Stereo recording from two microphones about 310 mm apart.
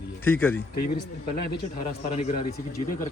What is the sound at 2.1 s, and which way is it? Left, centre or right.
Speech, centre.